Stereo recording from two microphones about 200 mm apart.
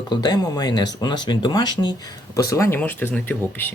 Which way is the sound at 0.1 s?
20° left (ahead or behind).